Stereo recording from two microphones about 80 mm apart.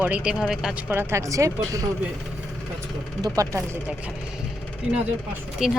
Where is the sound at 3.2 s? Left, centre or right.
Right.